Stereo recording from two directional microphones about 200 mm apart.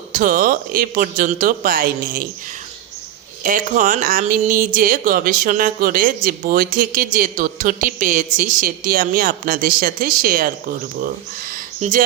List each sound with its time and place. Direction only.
0.1 s speech: 40° right (ahead or behind)
3.4 s speech: 40° right (ahead or behind)
11.5 s a sound: 40° right (ahead or behind)